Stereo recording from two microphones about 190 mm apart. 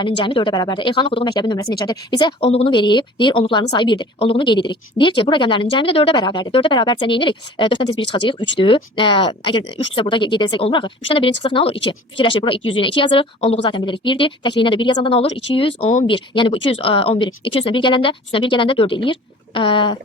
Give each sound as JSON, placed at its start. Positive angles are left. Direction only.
{"t": 0.3, "sound": "speech", "side_deg": 25}